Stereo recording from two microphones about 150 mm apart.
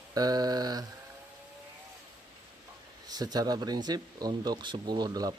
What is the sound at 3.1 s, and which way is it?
Speech, 25° right (ahead or behind).